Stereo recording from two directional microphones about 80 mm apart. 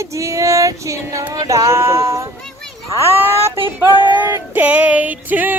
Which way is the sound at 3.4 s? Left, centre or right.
Right.